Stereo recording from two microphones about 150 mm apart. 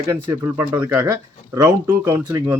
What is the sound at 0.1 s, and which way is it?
Speech, 15° right (ahead or behind).